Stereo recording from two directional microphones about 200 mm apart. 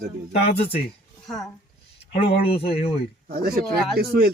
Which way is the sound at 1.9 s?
30° left (ahead or behind).